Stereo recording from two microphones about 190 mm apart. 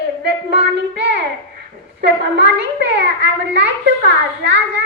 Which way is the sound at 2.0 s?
60° right (ahead or behind).